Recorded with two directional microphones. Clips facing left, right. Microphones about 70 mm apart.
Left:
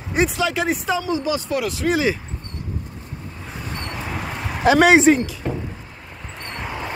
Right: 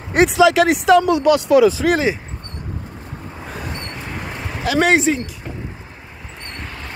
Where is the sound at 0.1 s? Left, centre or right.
Right.